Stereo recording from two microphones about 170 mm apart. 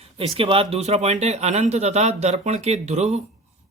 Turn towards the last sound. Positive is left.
turn(degrees=-40)  # may be behind; listen again after turning